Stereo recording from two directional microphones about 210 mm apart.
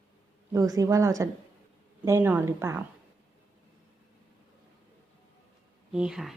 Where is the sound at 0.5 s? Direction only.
15° right (ahead or behind).